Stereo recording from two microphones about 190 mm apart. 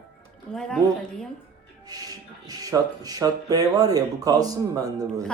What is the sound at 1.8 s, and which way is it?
Speech, 20° right (ahead or behind).